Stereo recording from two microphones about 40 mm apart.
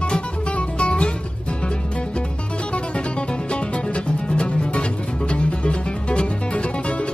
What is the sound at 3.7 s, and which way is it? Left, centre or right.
Music, left.